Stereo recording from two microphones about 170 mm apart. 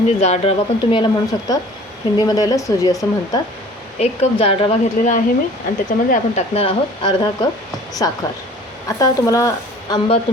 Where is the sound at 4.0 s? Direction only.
35° left (ahead or behind); by 10.0 s 20° left (ahead or behind).